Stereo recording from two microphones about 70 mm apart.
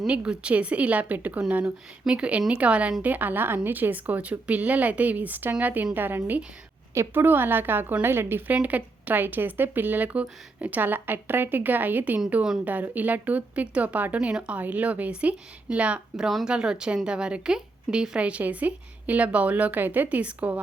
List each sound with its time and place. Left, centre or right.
0.1 s a woman's voice: centre
16.1 s a woman's voice: centre